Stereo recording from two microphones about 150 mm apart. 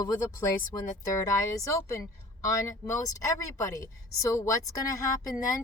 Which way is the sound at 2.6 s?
20° left (ahead or behind).